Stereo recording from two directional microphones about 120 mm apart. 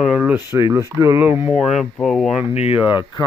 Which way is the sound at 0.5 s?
25° right (ahead or behind).